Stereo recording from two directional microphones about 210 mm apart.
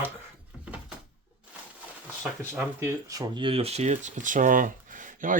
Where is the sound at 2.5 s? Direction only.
10° right (ahead or behind).